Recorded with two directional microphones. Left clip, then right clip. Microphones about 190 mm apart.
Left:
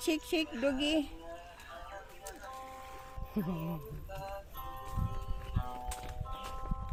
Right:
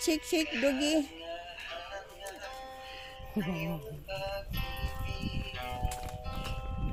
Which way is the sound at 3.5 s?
20° right (ahead or behind).